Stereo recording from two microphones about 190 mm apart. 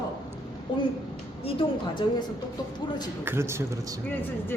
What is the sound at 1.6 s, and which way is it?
Speech, 30° left (ahead or behind).